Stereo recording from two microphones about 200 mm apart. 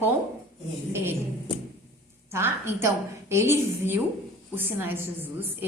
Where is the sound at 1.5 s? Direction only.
25° left (ahead or behind).